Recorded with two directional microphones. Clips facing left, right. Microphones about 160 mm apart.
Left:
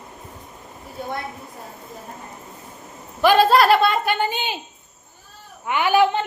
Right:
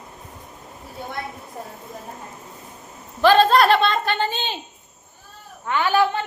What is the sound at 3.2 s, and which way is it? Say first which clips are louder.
A woman's voice: even; 10° left (ahead or behind).